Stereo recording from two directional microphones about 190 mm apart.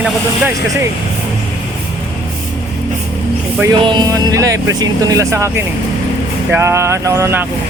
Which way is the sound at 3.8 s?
20° right (ahead or behind).